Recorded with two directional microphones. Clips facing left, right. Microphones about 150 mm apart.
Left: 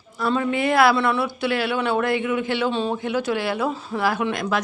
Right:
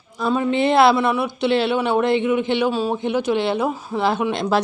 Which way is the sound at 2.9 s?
20° right (ahead or behind).